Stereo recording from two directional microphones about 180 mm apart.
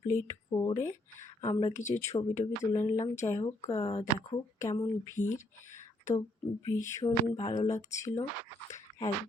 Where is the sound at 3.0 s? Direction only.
40° left (ahead or behind).